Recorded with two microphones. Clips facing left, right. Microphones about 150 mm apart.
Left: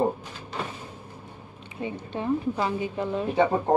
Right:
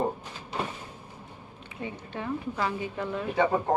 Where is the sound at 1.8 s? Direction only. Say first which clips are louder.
Left 5 dB; 25° left (ahead or behind).